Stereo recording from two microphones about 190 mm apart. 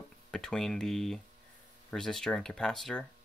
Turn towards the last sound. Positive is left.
turn(degrees=0)  # may be behind; listen again after turning